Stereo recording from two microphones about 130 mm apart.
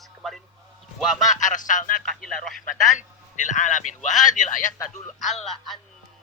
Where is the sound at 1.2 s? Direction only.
75° left (ahead or behind).